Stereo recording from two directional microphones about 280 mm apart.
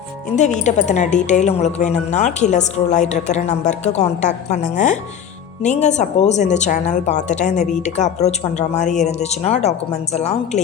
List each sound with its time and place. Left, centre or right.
0.3 s a woman's voice: left